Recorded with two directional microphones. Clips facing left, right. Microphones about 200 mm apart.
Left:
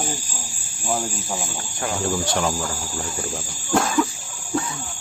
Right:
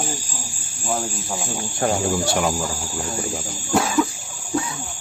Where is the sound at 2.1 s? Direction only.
10° right (ahead or behind).